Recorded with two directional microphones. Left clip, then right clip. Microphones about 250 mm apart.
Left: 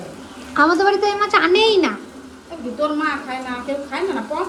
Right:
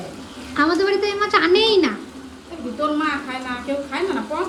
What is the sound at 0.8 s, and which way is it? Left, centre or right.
Speech, centre.